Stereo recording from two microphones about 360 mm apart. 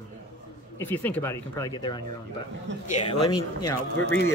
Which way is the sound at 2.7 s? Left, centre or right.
Right.